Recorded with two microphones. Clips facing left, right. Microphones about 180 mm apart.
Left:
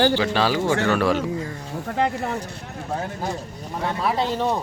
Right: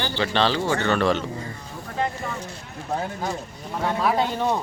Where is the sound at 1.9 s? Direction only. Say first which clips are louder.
Left 4 dB; 65° left (ahead or behind).